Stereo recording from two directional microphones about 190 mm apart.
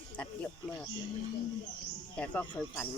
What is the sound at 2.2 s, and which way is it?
Speech, 10° left (ahead or behind).